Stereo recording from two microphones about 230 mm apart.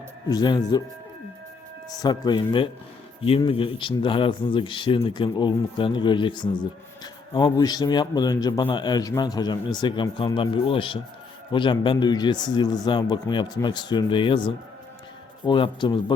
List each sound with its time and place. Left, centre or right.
0.3 s speech: centre
2.0 s a man's voice: centre